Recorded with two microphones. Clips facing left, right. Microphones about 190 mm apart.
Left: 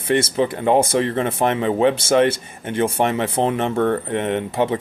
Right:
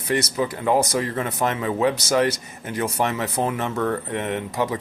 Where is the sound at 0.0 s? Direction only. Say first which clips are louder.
Left 4 dB; 25° left (ahead or behind).